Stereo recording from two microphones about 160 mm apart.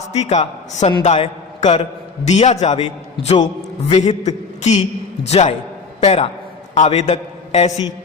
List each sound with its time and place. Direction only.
0.1 s a man's voice: 45° left (ahead or behind)